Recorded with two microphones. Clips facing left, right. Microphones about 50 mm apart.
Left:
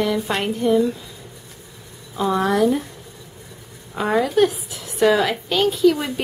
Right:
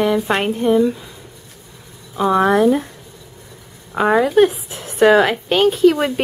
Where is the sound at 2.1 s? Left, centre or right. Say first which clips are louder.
Right 5 dB; right.